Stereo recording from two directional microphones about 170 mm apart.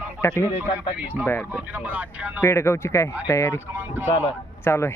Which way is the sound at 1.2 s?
15° left (ahead or behind).